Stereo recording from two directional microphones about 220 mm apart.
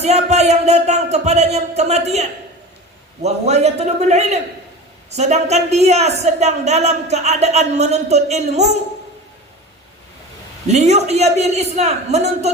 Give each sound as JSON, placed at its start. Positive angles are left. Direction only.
{"t": 0.0, "sound": "a man's voice", "side_deg": -30}
{"t": 10.7, "sound": "a man's voice", "side_deg": -30}